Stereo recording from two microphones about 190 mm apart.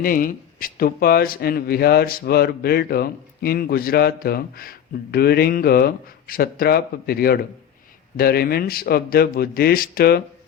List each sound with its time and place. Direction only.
0.0 s speech: 45° left (ahead or behind)